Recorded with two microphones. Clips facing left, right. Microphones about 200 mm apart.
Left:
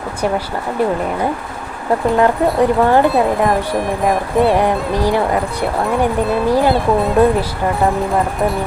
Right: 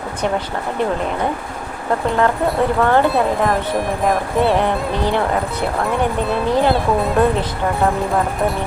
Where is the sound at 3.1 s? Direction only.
Centre (ahead or behind).